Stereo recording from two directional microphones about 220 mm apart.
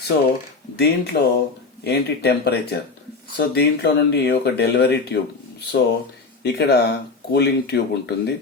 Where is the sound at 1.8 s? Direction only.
45° left (ahead or behind).